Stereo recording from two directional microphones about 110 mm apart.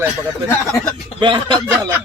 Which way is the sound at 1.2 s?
45° right (ahead or behind).